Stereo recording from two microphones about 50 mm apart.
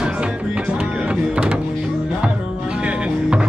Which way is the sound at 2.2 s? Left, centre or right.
Right.